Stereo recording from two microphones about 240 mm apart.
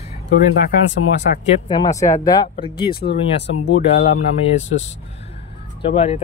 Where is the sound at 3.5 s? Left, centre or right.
Left.